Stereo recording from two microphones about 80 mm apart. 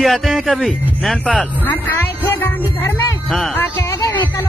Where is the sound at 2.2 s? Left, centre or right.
Left.